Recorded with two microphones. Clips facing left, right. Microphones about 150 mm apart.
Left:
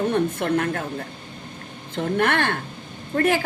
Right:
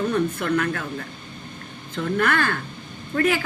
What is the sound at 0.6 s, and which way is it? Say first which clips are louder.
Speech: left 1 dB; 45° left (ahead or behind).